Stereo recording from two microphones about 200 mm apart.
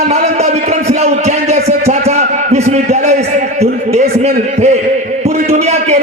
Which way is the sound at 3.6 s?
35° right (ahead or behind).